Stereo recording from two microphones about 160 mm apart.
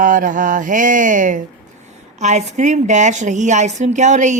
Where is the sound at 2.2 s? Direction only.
45° right (ahead or behind).